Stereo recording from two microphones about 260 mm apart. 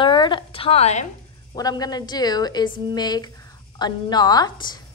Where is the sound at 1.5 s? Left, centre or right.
Centre.